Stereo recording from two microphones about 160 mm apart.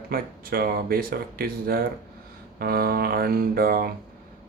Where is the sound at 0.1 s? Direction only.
70° right (ahead or behind).